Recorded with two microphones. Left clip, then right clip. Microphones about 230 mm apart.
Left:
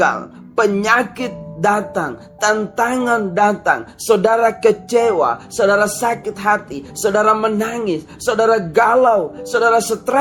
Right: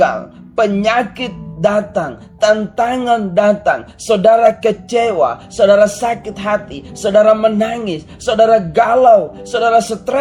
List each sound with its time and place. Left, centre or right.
0.0 s speech: left